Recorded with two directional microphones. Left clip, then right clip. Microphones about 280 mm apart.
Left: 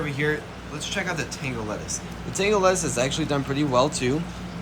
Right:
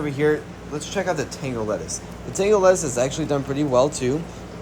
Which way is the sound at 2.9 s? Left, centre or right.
Centre.